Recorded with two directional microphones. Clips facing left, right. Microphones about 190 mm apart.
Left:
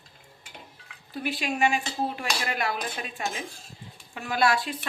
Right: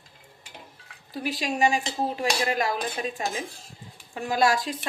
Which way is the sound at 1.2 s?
40° right (ahead or behind).